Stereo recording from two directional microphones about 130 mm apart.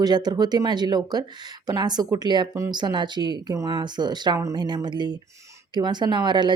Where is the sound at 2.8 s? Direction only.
35° right (ahead or behind).